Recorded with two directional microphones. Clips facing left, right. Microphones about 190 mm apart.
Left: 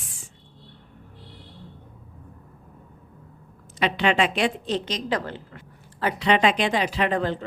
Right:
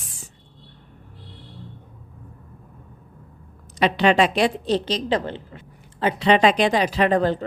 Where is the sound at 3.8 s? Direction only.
40° right (ahead or behind).